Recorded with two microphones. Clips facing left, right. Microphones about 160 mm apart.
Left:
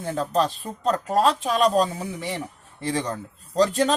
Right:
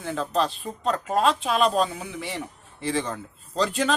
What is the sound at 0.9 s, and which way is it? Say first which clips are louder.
Speech: left 2 dB; 40° left (ahead or behind).